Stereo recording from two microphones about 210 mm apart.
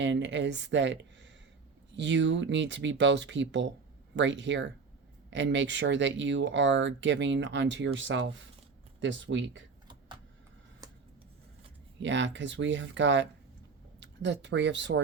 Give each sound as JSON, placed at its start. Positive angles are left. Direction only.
{"t": 0.0, "sound": "speech", "side_deg": -60}
{"t": 10.8, "sound": "a sound", "side_deg": -15}
{"t": 12.0, "sound": "speech", "side_deg": -60}